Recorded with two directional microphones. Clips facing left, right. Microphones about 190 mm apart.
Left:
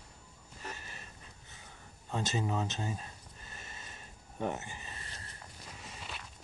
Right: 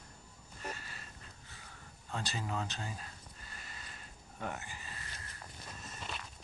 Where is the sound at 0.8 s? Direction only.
20° left (ahead or behind).